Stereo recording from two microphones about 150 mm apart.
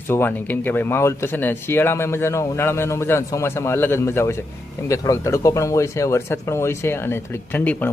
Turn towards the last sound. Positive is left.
turn(degrees=10)  # may be behind; listen again after turning